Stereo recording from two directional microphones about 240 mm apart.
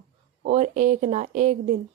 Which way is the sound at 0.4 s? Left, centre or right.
Right.